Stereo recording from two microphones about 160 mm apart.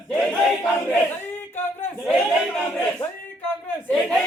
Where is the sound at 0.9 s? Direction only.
15° left (ahead or behind).